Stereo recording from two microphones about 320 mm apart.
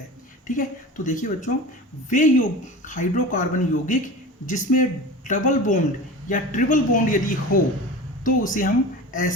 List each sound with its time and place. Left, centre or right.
0.4 s speech: left